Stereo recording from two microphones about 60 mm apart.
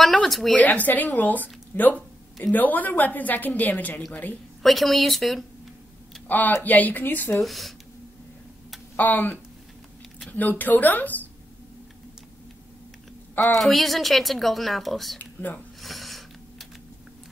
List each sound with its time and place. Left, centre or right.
0.0 s speech: centre
0.7 s a woman's voice: left
4.6 s speech: centre
6.2 s speech: left
7.4 s speech: centre
8.9 s a woman's voice: left
13.6 s speech: centre
15.1 s speech: left
15.8 s a sound: centre